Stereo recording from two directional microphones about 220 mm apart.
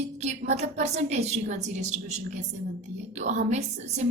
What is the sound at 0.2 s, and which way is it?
A woman's voice, 30° right (ahead or behind).